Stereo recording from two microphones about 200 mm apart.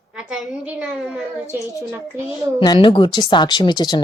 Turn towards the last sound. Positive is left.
turn(degrees=20)  # may be behind; listen again after turning